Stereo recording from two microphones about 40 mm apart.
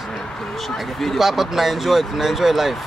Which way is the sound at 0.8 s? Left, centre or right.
Centre.